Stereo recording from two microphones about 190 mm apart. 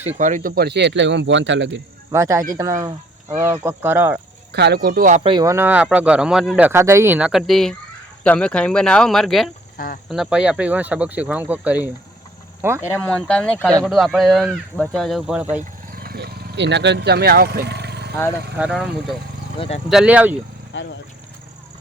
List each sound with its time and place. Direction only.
0.0 s speech: 40° right (ahead or behind); by 1.8 s 75° right (ahead or behind)
2.1 s speech: 15° right (ahead or behind)
4.5 s speech: 60° right (ahead or behind); by 5.2 s 45° right (ahead or behind)
5.2 s speech: 25° right (ahead or behind)
5.5 s speech: 10° right (ahead or behind)
9.7 s speech: 50° left (ahead or behind)
10.1 s speech: 5° right (ahead or behind)
12.8 s speech: 10° left (ahead or behind); by 15.6 s 10° right (ahead or behind)
15.9 s vehicle: 50° right (ahead or behind)
18.5 s speech: 5° right (ahead or behind)
19.5 s speech: 30° left (ahead or behind)
19.9 s speech: 5° right (ahead or behind)
20.7 s speech: 75° left (ahead or behind)